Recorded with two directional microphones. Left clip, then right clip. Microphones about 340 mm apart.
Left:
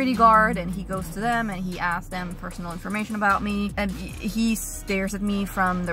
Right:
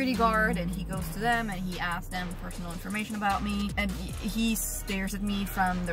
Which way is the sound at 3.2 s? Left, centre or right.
Centre.